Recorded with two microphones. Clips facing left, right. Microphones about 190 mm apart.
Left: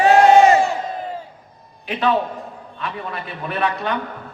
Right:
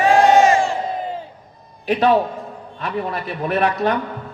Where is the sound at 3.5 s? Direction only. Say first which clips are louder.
Right 4 dB; 40° right (ahead or behind).